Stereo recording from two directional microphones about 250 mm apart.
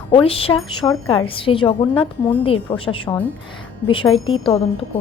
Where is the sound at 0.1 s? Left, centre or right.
Left.